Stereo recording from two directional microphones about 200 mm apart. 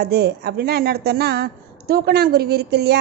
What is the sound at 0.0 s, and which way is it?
A woman's voice, 55° right (ahead or behind).